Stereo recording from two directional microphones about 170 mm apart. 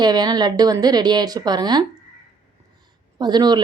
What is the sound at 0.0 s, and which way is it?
A woman's voice, 25° right (ahead or behind).